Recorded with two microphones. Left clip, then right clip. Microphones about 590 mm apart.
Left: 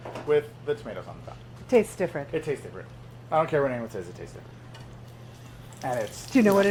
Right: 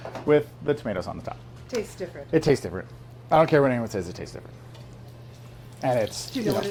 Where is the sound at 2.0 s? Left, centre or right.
Left.